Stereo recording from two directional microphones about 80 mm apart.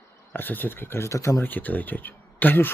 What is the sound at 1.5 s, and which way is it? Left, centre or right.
Speech, left.